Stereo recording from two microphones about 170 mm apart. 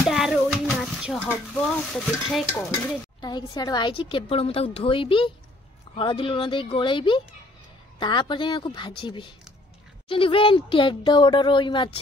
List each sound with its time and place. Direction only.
0.0 s speech: centre (ahead or behind)
3.2 s a woman's voice: 25° left (ahead or behind)